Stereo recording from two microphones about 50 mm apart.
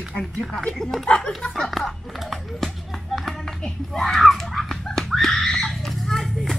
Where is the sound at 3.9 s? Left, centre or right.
Centre.